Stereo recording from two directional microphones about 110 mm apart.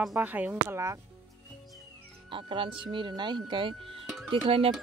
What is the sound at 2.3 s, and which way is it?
Speech, 50° right (ahead or behind).